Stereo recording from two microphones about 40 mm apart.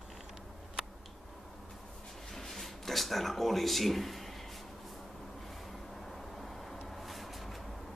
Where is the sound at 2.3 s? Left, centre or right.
Centre.